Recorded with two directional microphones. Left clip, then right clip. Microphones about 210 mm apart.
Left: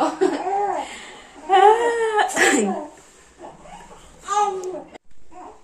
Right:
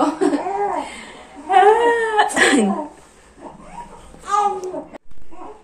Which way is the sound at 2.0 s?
15° left (ahead or behind).